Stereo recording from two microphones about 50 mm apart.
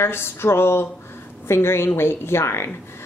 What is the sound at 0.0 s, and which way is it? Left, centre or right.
A woman's voice, left.